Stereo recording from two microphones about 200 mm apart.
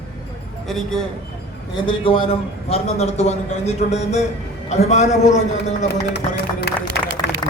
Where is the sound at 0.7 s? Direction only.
5° left (ahead or behind).